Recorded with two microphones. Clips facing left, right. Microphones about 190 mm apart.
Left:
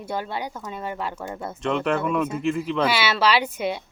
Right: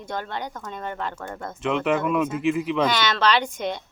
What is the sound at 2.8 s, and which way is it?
Speech, 10° left (ahead or behind).